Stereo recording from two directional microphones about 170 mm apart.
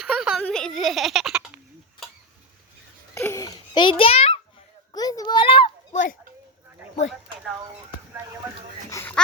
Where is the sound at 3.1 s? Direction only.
15° left (ahead or behind); by 4.4 s 35° left (ahead or behind).